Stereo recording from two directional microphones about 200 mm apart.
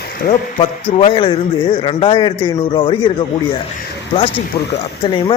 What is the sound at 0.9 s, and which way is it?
Speech, 30° left (ahead or behind).